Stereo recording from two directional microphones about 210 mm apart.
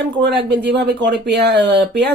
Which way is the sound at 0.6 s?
55° right (ahead or behind).